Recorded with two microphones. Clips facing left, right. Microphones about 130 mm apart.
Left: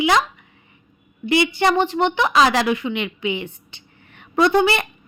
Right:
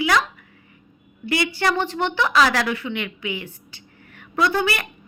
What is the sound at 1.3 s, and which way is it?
A woman's voice, 20° left (ahead or behind).